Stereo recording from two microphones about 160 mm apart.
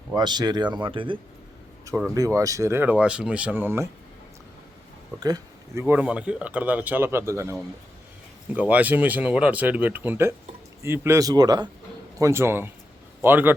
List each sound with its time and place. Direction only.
0.1 s speech: 25° right (ahead or behind)
2.0 s speech: 20° right (ahead or behind)
5.2 s speech: 25° right (ahead or behind)
5.8 s speech: 10° right (ahead or behind)
8.5 s speech: 10° right (ahead or behind)